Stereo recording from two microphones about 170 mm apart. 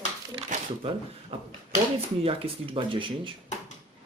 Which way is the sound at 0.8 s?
35° right (ahead or behind).